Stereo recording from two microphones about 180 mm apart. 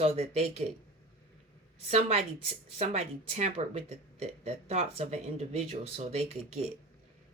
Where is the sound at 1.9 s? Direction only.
35° right (ahead or behind).